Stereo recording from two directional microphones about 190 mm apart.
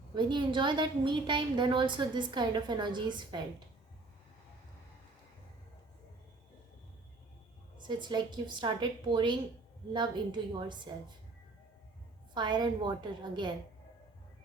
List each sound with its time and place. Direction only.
0.1 s a woman's voice: 25° right (ahead or behind)
7.8 s a woman's voice: 25° right (ahead or behind)
12.3 s a woman's voice: 25° right (ahead or behind)